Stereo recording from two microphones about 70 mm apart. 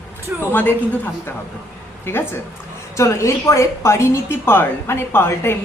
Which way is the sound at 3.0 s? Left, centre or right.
Left.